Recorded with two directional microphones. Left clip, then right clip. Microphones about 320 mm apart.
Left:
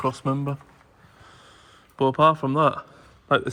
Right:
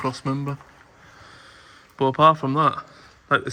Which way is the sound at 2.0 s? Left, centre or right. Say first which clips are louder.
Right 2 dB; centre.